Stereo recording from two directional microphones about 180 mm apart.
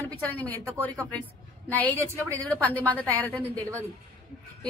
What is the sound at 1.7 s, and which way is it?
Speech, 10° left (ahead or behind).